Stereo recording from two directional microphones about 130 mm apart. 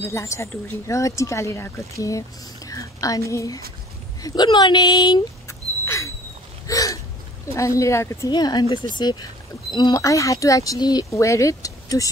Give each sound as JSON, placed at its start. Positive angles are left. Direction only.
{"t": 0.1, "sound": "speech", "side_deg": 20}
{"t": 5.5, "sound": "rodents", "side_deg": 20}
{"t": 6.7, "sound": "hiccup", "side_deg": 25}
{"t": 7.5, "sound": "speech", "side_deg": 25}
{"t": 8.3, "sound": "speech", "side_deg": 35}